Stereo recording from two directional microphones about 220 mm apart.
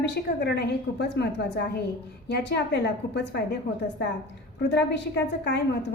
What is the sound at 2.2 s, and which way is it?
Speech, 50° left (ahead or behind).